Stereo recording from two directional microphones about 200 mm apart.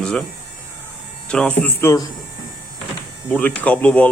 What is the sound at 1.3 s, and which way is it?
Speech, 5° left (ahead or behind).